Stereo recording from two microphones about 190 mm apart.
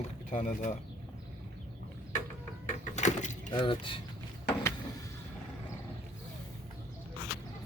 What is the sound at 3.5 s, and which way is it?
Speech, 25° left (ahead or behind).